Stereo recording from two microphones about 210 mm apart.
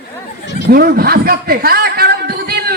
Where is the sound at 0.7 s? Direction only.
45° right (ahead or behind).